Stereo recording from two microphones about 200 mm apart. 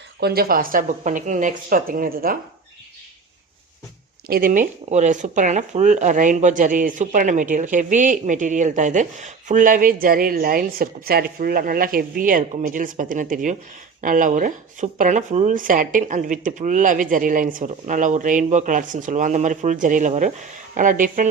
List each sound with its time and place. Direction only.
0.2 s a woman's voice: 50° right (ahead or behind)
4.3 s speech: 45° right (ahead or behind)